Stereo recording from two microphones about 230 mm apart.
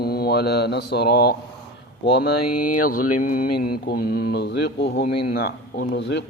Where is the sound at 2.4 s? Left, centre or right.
Left.